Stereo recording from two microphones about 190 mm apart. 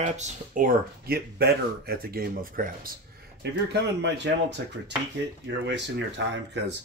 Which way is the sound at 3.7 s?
65° right (ahead or behind).